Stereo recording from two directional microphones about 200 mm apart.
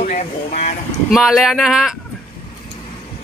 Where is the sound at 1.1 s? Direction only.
Centre (ahead or behind).